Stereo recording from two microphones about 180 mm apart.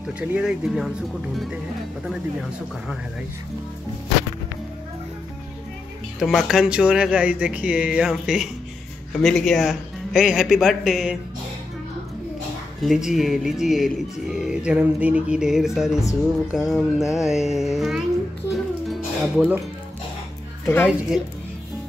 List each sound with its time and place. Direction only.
0.2 s speech: 5° right (ahead or behind)
6.1 s speech: centre (ahead or behind)
12.8 s speech: centre (ahead or behind)
18.9 s music: centre (ahead or behind)
20.6 s a woman's voice: 10° left (ahead or behind)